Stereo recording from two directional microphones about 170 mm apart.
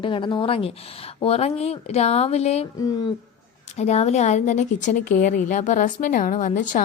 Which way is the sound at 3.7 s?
40° left (ahead or behind).